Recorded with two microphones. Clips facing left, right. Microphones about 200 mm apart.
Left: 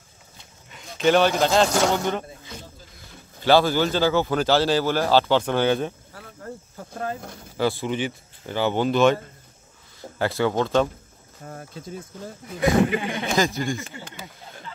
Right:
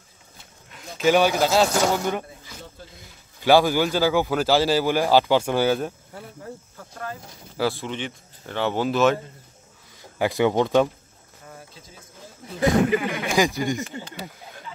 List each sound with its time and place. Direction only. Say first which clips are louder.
0.7 s speech: even; centre (ahead or behind)
3.4 s speech: right 1 dB; 10° right (ahead or behind)
7.5 s speech: left 2 dB; centre (ahead or behind)
10.1 s speech: right 2 dB; 15° right (ahead or behind)
11.4 s cricket: left 6 dB; 55° left (ahead or behind)
12.9 s speech: right 2 dB; 30° left (ahead or behind)
13.3 s speech: right 2 dB; 15° right (ahead or behind)